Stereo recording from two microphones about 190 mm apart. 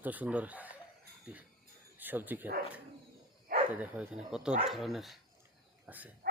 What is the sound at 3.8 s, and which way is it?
Speech, 5° right (ahead or behind).